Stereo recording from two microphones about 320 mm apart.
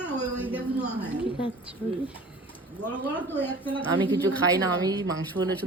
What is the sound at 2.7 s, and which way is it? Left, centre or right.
A woman's voice, centre.